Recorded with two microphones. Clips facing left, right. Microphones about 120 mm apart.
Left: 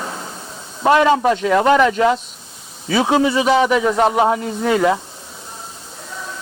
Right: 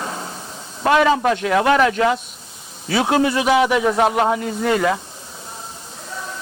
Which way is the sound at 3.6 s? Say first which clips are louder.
Left 1 dB; 10° right (ahead or behind).